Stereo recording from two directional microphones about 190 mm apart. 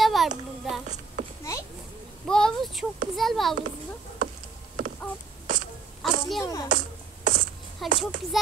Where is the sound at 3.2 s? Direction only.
Centre (ahead or behind).